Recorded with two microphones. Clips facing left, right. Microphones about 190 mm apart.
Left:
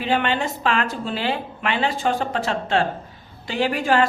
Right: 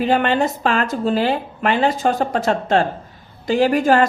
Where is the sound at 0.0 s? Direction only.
40° right (ahead or behind).